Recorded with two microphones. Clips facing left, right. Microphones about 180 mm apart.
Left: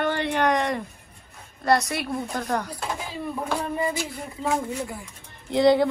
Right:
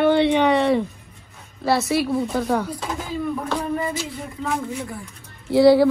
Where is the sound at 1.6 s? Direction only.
Centre (ahead or behind).